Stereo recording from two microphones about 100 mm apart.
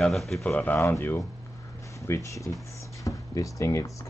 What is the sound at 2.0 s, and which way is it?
Speech, 30° left (ahead or behind).